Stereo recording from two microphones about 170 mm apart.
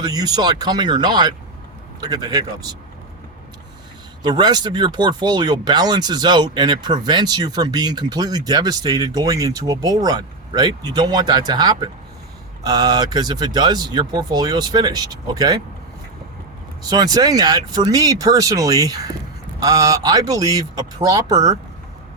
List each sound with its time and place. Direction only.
0.0 s speech: 20° right (ahead or behind)
4.2 s speech: 25° right (ahead or behind)
16.8 s speech: 25° right (ahead or behind)